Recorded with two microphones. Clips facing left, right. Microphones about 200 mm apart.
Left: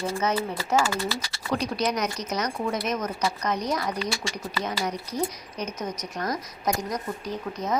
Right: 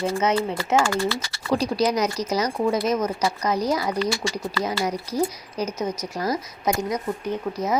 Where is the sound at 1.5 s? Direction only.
30° right (ahead or behind).